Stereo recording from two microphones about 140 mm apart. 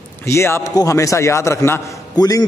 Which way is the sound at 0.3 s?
20° left (ahead or behind).